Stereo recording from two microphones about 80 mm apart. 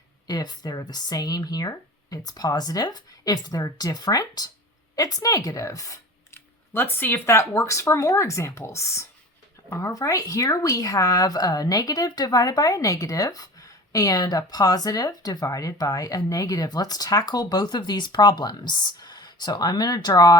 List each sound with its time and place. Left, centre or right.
0.3 s speech: left
6.3 s speech: left
9.9 s speech: left